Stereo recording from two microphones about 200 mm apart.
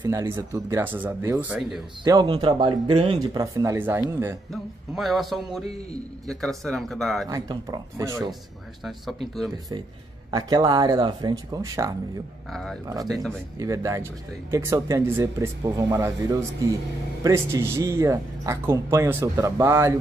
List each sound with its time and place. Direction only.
0.0 s speech: 15° right (ahead or behind)
2.0 s speech: 20° right (ahead or behind)
3.5 s speech: 15° right (ahead or behind)
4.5 s music: centre (ahead or behind)
7.2 s speech: 20° right (ahead or behind)
8.8 s music: centre (ahead or behind)
10.3 s speech: 20° right (ahead or behind)